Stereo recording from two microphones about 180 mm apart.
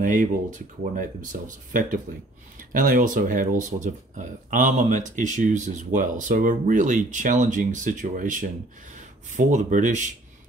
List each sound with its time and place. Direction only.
0.0 s speech: 45° right (ahead or behind)